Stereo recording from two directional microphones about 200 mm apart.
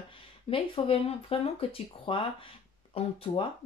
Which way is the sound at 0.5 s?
25° left (ahead or behind).